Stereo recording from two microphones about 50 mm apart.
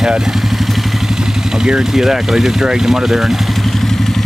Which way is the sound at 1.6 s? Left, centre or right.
Centre.